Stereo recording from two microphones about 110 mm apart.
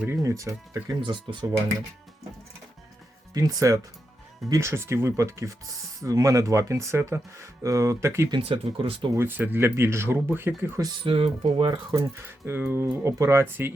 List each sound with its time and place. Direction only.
0.2 s speech: 30° right (ahead or behind)
1.1 s speech: 50° right (ahead or behind)
3.3 s speech: 35° right (ahead or behind)
8.3 s speech: 50° right (ahead or behind)
9.1 s speech: 20° right (ahead or behind)
11.0 s speech: 55° right (ahead or behind)
11.4 s speech: 45° right (ahead or behind)
12.5 s speech: 20° right (ahead or behind)